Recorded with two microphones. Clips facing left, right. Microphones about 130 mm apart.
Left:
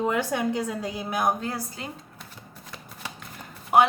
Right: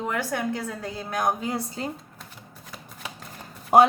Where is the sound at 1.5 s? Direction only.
30° right (ahead or behind).